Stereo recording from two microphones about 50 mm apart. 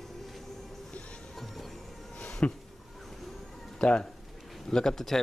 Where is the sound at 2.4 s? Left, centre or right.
Left.